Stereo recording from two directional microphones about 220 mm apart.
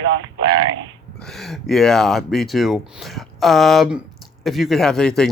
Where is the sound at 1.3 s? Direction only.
Centre (ahead or behind).